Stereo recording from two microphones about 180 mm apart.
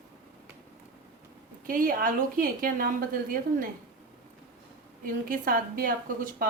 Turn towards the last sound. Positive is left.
turn(degrees=-50)  # may be behind; listen again after turning